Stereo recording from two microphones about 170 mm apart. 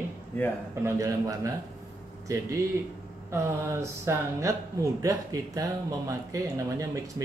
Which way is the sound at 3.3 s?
15° right (ahead or behind).